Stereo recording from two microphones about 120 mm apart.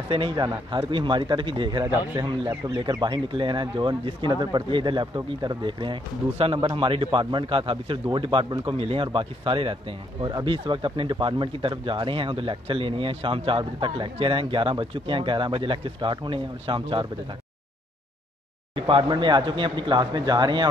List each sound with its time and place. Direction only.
0.1 s speech: 45° right (ahead or behind)
6.3 s speech: 55° right (ahead or behind)
18.8 s speech: 45° right (ahead or behind)